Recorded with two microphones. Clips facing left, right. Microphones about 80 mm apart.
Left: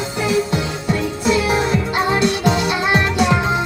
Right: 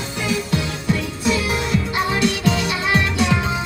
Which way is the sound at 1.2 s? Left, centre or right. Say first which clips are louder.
Left 5 dB; left.